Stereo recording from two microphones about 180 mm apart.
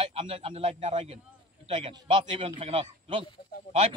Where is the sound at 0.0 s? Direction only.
30° right (ahead or behind).